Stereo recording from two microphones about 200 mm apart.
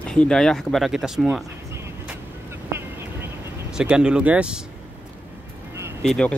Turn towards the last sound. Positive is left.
turn(degrees=5)  # may be behind; listen again after turning